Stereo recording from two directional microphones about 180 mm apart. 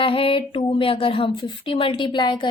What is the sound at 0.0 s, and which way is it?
A woman's voice, 30° left (ahead or behind).